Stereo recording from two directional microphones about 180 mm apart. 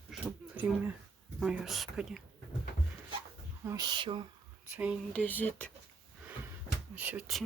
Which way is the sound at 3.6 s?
20° right (ahead or behind).